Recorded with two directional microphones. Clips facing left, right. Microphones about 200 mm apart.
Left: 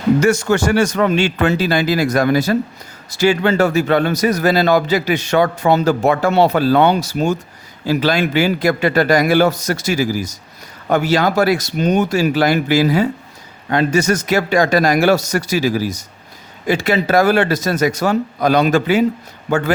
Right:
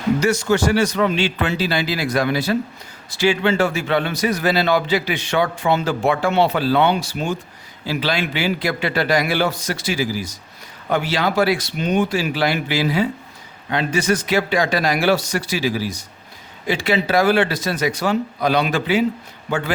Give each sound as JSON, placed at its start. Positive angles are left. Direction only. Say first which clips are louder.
{"t": 0.2, "sound": "a man's voice", "louder": "left 3 dB", "side_deg": 50}